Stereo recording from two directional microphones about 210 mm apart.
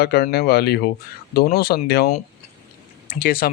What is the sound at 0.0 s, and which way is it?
Speech, 50° left (ahead or behind).